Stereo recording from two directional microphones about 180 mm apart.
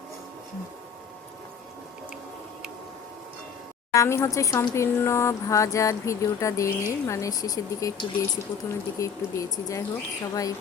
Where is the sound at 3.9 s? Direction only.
15° left (ahead or behind).